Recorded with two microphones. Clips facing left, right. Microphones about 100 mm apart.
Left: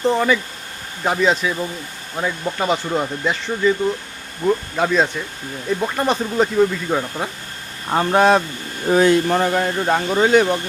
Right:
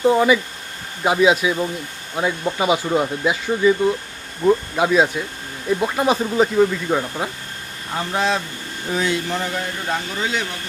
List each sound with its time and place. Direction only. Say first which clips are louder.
0.0 s speech: right 2 dB; 5° right (ahead or behind)
7.9 s speech: left 7 dB; 55° left (ahead or behind)